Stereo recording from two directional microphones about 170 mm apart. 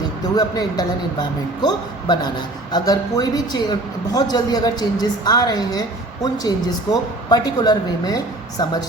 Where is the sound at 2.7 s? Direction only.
25° left (ahead or behind).